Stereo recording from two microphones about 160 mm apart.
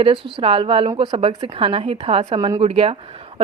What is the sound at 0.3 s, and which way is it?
A woman's voice, 30° right (ahead or behind).